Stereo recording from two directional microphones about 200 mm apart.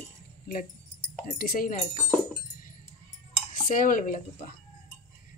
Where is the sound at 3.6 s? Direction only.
45° left (ahead or behind).